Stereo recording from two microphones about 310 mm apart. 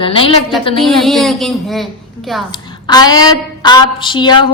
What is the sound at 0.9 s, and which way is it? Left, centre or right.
A woman's voice, centre.